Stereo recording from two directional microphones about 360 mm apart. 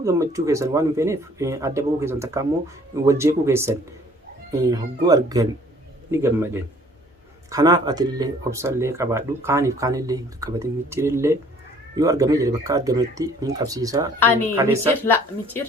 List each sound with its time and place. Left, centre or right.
0.0 s speech: centre
15.0 s a woman's voice: centre